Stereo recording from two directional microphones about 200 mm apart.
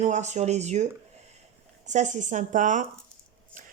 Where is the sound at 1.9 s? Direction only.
35° right (ahead or behind).